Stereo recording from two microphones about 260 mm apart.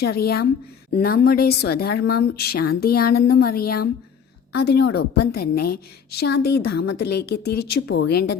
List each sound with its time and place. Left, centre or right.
0.0 s speech: left